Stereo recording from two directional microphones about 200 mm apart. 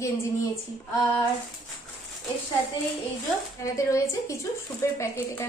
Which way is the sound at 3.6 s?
15° left (ahead or behind).